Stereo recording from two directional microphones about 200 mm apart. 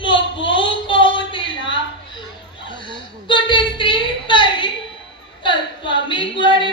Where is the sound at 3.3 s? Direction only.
25° left (ahead or behind).